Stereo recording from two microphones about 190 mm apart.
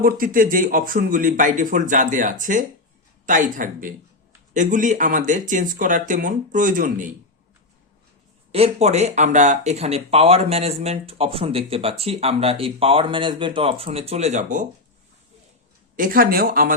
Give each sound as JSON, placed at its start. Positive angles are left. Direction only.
{"t": 0.0, "sound": "a man's voice", "side_deg": -50}
{"t": 8.5, "sound": "speech", "side_deg": -35}
{"t": 16.0, "sound": "a man's voice", "side_deg": -50}